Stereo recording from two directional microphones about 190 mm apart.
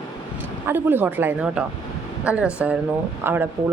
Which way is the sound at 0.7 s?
10° right (ahead or behind).